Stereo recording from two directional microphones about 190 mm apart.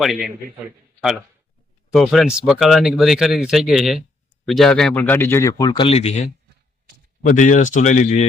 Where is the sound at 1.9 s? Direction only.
Centre (ahead or behind); by 6.2 s 35° left (ahead or behind).